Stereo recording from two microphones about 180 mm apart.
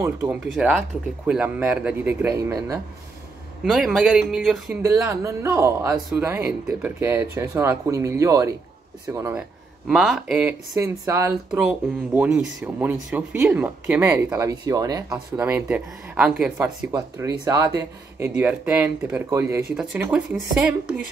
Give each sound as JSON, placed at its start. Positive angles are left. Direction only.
{"t": 0.0, "sound": "speech", "side_deg": -15}
{"t": 0.6, "sound": "speech", "side_deg": -5}
{"t": 3.6, "sound": "speech", "side_deg": 0}
{"t": 4.8, "sound": "speech", "side_deg": -15}
{"t": 9.8, "sound": "speech", "side_deg": 0}
{"t": 17.5, "sound": "speech", "side_deg": -20}